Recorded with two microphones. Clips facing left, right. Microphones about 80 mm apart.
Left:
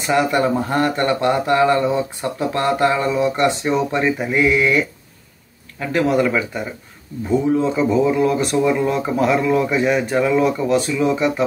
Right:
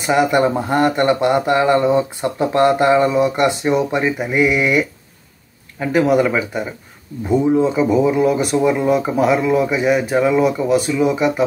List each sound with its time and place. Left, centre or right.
0.0 s speech: centre